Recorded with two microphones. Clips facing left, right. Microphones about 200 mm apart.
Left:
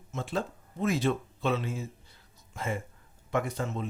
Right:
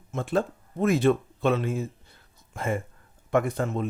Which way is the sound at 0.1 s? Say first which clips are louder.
Right 7 dB; 55° right (ahead or behind).